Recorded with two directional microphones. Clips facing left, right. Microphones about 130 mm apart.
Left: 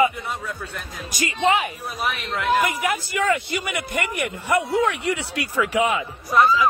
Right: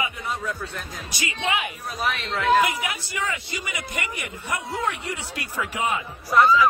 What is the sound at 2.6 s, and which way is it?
Speech, 50° left (ahead or behind).